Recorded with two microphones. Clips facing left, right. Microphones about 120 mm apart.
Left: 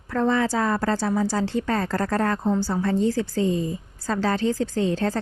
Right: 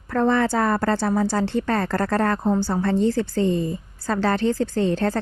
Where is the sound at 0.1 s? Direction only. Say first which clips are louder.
Right 2 dB; 60° right (ahead or behind).